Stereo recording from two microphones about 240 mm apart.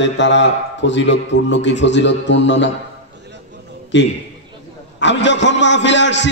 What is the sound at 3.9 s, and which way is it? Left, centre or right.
A man's voice, left.